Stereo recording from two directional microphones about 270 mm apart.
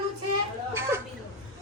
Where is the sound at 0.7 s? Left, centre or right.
Centre.